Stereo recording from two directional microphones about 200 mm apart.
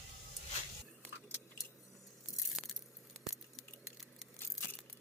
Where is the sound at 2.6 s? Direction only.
Centre (ahead or behind).